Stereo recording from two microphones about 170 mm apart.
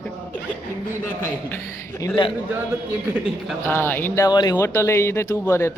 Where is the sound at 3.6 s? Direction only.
10° left (ahead or behind).